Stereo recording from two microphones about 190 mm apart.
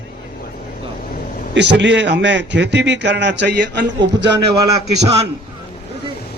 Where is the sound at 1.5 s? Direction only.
65° right (ahead or behind).